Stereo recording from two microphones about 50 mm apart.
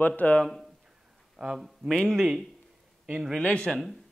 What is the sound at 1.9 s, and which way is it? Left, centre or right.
Speech, centre.